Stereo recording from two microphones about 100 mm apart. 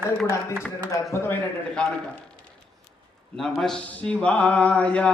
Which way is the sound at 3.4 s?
5° left (ahead or behind).